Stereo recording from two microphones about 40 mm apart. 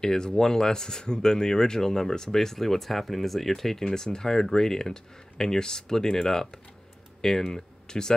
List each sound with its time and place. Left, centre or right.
0.0 s speech: centre